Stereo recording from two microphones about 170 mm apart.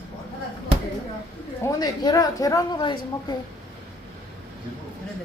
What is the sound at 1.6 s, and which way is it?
A woman's voice, 20° left (ahead or behind).